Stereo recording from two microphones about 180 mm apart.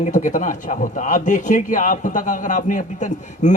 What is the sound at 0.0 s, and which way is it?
A man's voice, 45° left (ahead or behind).